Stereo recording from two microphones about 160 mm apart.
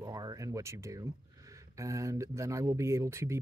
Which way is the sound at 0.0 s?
25° right (ahead or behind).